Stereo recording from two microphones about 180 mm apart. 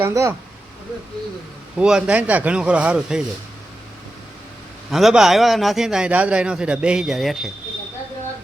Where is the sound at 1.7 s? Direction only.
5° right (ahead or behind).